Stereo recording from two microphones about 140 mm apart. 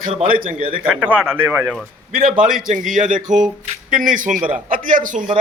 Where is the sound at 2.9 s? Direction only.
65° right (ahead or behind).